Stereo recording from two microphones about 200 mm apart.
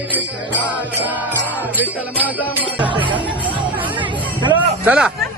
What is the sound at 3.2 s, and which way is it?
Music, 25° right (ahead or behind).